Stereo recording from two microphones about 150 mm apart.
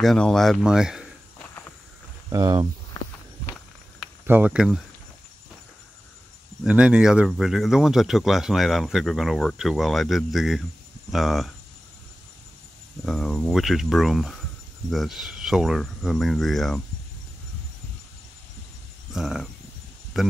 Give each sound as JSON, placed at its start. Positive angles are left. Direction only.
{"t": 0.0, "sound": "speech", "side_deg": 5}
{"t": 2.2, "sound": "speech", "side_deg": -25}
{"t": 4.3, "sound": "speech", "side_deg": -10}
{"t": 6.6, "sound": "speech", "side_deg": -5}
{"t": 13.0, "sound": "speech", "side_deg": 0}
{"t": 19.1, "sound": "speech", "side_deg": -5}